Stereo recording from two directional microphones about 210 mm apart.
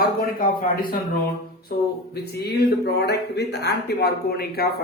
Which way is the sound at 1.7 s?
50° left (ahead or behind).